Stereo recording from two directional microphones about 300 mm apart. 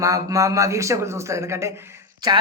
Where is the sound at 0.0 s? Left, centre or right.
Centre.